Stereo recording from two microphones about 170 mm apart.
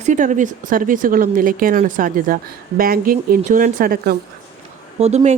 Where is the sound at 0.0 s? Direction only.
45° right (ahead or behind); by 4.2 s 60° right (ahead or behind).